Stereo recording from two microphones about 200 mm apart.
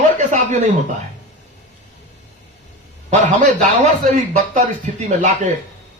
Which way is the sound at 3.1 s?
40° right (ahead or behind).